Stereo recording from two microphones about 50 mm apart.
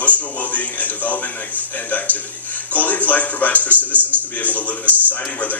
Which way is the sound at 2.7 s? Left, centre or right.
Left.